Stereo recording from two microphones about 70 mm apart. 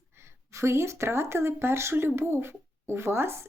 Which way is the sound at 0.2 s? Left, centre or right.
Right.